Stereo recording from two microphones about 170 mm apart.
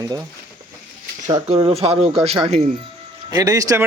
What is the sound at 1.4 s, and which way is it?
Speech, 35° right (ahead or behind).